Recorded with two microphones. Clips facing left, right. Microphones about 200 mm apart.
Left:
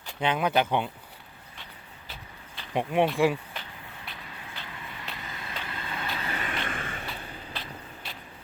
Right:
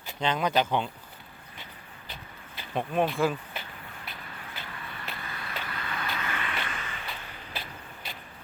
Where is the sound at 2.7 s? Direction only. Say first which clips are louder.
Left 2 dB; 15° left (ahead or behind).